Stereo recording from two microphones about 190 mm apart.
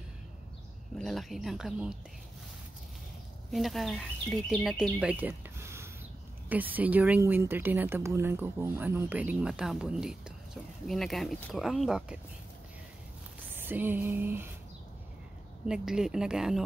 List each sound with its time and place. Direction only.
0.9 s speech: centre (ahead or behind)
3.5 s speech: centre (ahead or behind)
13.7 s speech: 10° right (ahead or behind)
15.6 s speech: 5° right (ahead or behind)